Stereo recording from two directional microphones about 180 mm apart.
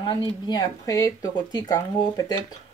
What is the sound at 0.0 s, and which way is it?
Speech, 30° left (ahead or behind).